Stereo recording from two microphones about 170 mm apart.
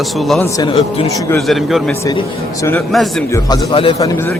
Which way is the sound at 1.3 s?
Centre (ahead or behind).